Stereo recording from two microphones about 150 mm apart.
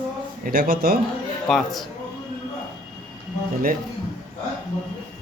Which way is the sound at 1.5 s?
Centre (ahead or behind).